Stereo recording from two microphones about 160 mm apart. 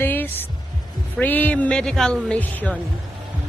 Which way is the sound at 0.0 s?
10° left (ahead or behind).